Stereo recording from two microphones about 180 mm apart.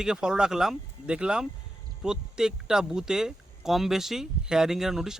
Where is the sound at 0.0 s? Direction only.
5° right (ahead or behind).